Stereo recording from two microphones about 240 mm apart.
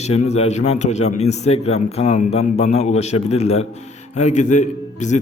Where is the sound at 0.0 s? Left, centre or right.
Left.